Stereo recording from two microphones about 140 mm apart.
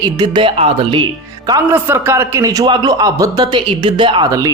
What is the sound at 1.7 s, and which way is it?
A man's voice, 15° right (ahead or behind).